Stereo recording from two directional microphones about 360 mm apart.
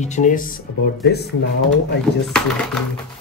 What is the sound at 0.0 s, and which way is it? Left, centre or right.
Speech, centre.